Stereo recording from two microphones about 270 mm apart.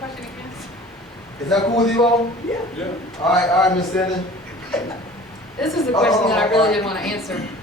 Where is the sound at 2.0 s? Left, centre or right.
Centre.